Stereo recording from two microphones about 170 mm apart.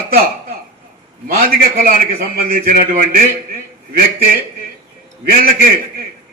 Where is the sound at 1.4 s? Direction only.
60° right (ahead or behind).